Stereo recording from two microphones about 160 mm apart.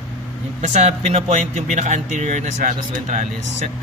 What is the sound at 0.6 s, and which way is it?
Speech, 45° right (ahead or behind).